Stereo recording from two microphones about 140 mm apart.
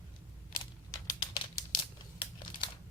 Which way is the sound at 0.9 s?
30° left (ahead or behind).